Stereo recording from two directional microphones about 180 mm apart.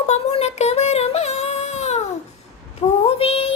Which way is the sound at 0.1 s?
35° left (ahead or behind).